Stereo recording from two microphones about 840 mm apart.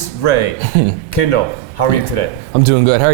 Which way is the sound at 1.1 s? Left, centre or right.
Left.